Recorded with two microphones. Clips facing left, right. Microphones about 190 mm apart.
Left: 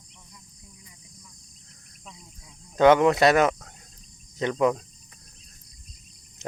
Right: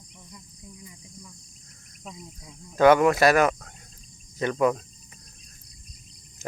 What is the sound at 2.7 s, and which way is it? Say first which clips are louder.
Speech: even; 20° left (ahead or behind).